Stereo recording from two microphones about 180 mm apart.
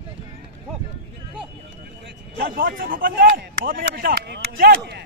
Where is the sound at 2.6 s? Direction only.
55° right (ahead or behind).